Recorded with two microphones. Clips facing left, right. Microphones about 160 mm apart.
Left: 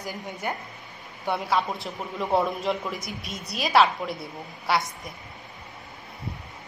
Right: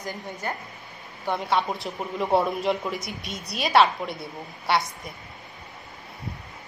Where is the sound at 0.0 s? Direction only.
10° left (ahead or behind).